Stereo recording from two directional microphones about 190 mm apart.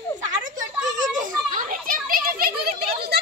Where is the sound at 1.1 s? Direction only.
45° right (ahead or behind).